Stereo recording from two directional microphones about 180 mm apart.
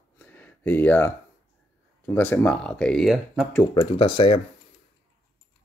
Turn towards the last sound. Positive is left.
turn(degrees=30)  # may be behind; listen again after turning